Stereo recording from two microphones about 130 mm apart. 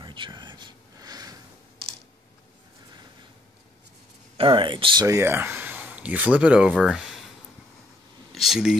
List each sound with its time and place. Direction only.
0.0 s a sound: 35° right (ahead or behind)
4.4 s speech: 40° right (ahead or behind)
5.0 s speech: 20° right (ahead or behind); by 7.2 s centre (ahead or behind)
8.4 s speech: 5° right (ahead or behind)